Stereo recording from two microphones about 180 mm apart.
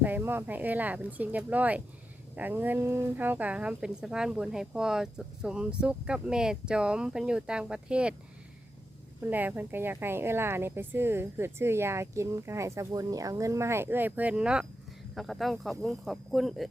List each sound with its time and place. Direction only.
0.0 s speech: 10° right (ahead or behind)
9.2 s speech: 10° right (ahead or behind)